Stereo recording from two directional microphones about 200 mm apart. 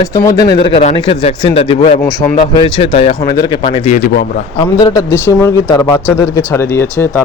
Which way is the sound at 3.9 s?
45° left (ahead or behind).